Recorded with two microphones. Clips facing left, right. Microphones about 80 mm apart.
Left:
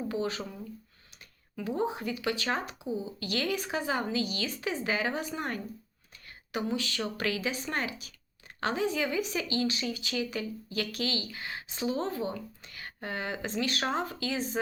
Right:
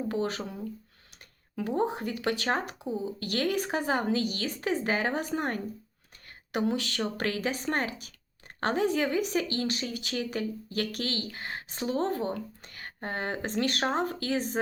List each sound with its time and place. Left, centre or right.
0.1 s speech: right
1.5 s speech: right
2.7 s speech: centre
3.2 s speech: right